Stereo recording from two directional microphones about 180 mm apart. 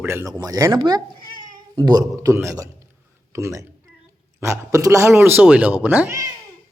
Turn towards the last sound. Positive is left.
turn(degrees=-10)  # may be behind; listen again after turning